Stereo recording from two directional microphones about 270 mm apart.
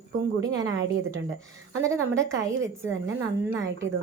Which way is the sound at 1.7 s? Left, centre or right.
Centre.